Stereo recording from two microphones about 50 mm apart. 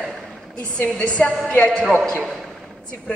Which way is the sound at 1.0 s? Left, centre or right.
Left.